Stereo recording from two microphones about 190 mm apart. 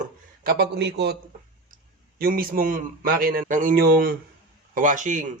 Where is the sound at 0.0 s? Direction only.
55° right (ahead or behind).